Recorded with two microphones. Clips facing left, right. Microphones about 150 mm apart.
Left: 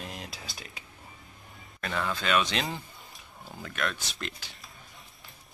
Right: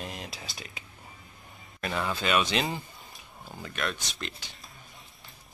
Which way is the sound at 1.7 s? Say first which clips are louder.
Right 1 dB; 10° right (ahead or behind).